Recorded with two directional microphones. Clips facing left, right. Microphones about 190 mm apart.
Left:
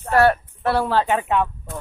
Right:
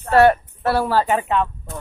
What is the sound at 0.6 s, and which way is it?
Speech, 5° right (ahead or behind).